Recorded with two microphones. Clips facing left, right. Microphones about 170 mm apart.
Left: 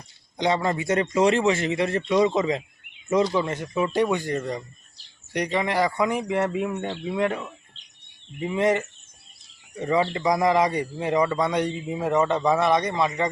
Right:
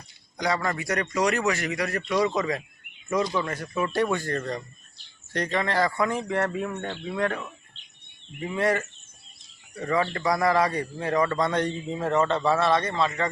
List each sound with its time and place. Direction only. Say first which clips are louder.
0.3 s a man's voice: left 4 dB; 25° left (ahead or behind)